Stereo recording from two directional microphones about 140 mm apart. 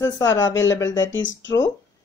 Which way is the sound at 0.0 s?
25° left (ahead or behind).